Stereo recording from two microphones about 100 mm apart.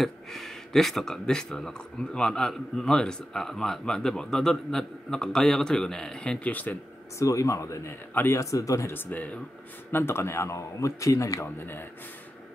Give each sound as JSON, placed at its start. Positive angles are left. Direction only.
{"t": 0.0, "sound": "speech", "side_deg": 0}
{"t": 7.2, "sound": "speech", "side_deg": 30}
{"t": 8.1, "sound": "speech", "side_deg": 20}
{"t": 8.4, "sound": "speech", "side_deg": 35}
{"t": 8.9, "sound": "speech", "side_deg": 20}
{"t": 11.4, "sound": "speech", "side_deg": 20}